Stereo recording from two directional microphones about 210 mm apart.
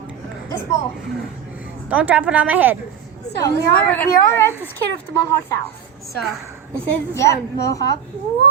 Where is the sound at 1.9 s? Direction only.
5° right (ahead or behind).